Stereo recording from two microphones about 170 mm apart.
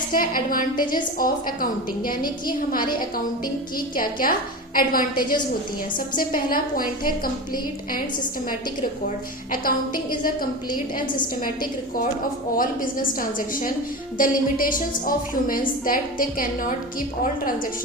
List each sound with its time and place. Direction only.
0.1 s a woman's voice: 55° left (ahead or behind)
3.9 s a woman's voice: 55° left (ahead or behind)
9.0 s a woman's voice: 55° left (ahead or behind)
11.4 s a woman's voice: 55° left (ahead or behind)